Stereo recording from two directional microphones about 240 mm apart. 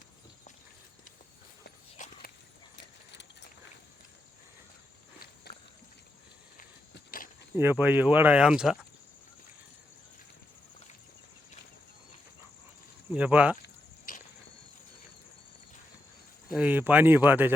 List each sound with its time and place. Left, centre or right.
1.6 s walk: left
5.5 s a sound: left
7.5 s speech: centre
13.1 s speech: centre
14.1 s a sound: left
16.5 s speech: centre